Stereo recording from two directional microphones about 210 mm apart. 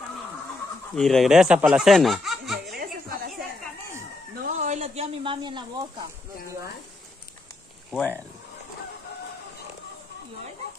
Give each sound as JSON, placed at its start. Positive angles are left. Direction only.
{"t": 0.9, "sound": "speech", "side_deg": 0}
{"t": 4.4, "sound": "a sound", "side_deg": -35}
{"t": 7.9, "sound": "speech", "side_deg": 5}